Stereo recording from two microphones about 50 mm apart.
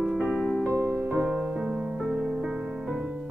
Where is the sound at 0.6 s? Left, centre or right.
Right.